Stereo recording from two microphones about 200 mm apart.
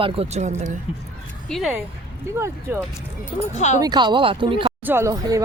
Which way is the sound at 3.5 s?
35° left (ahead or behind).